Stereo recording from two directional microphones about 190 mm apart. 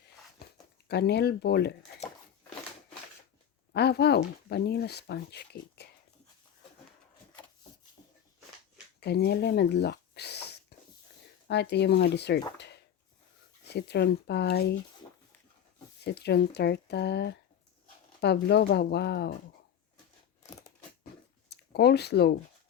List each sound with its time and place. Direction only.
0.9 s speech: 60° left (ahead or behind)
3.7 s speech: 60° left (ahead or behind)
8.0 s a sound: 20° left (ahead or behind)
9.0 s a sound: 60° left (ahead or behind)
11.4 s speech: 60° left (ahead or behind)
12.5 s a sound: 60° left (ahead or behind)
13.7 s speech: 60° left (ahead or behind)
16.1 s speech: 60° left (ahead or behind)
21.5 s speech: 60° left (ahead or behind)